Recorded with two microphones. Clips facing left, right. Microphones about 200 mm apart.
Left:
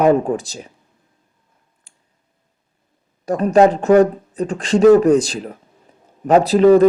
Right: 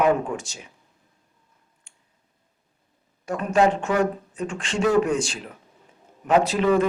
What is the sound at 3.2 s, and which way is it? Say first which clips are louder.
Speech: left 7 dB; 35° left (ahead or behind).